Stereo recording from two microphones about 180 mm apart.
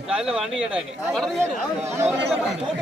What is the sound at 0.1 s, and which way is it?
Speech, 5° right (ahead or behind).